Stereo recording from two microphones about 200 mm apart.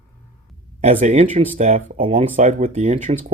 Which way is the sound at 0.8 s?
35° right (ahead or behind).